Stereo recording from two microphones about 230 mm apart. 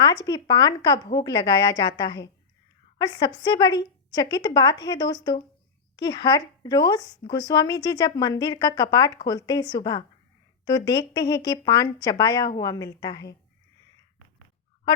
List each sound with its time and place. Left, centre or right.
0.0 s speech: centre